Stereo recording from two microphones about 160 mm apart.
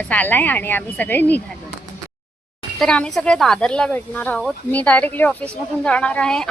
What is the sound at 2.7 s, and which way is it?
A woman's voice, 5° left (ahead or behind).